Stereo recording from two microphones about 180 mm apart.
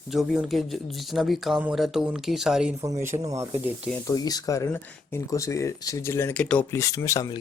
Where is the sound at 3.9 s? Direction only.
20° left (ahead or behind).